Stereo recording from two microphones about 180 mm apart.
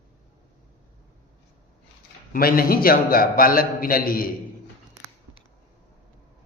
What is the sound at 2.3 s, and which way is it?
A man's voice, 55° left (ahead or behind).